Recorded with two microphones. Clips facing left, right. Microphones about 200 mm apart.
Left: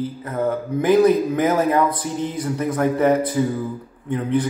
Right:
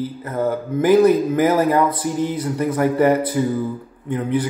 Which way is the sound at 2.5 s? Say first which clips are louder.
Right 2 dB; 5° right (ahead or behind).